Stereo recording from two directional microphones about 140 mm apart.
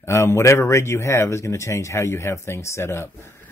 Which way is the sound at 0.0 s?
20° left (ahead or behind).